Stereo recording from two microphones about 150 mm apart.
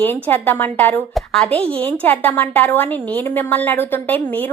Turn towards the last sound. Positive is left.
turn(degrees=10)  # may be behind; listen again after turning